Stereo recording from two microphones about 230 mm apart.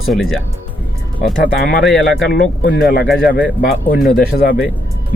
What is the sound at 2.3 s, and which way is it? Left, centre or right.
Speech, left.